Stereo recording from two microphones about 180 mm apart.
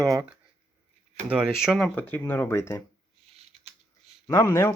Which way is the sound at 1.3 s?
5° right (ahead or behind).